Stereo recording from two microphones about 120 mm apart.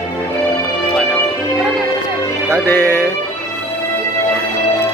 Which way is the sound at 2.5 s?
20° left (ahead or behind).